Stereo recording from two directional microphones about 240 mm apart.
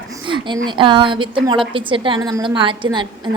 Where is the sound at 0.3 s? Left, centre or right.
Centre.